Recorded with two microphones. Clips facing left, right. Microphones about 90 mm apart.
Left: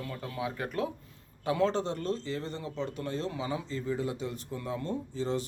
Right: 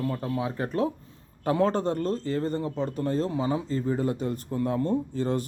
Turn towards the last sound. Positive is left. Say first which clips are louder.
# right 5 dB
turn(degrees=-50)  # may be behind; listen again after turning